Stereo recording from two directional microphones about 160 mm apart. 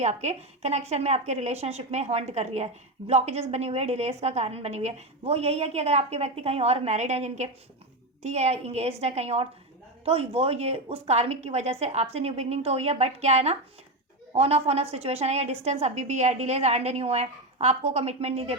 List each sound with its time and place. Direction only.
0.0 s a woman's voice: 45° right (ahead or behind)